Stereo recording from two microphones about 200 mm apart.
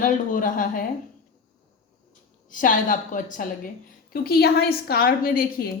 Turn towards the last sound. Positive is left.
turn(degrees=45)  # may be behind; listen again after turning